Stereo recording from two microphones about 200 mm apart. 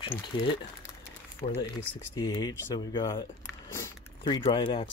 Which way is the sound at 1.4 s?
40° left (ahead or behind).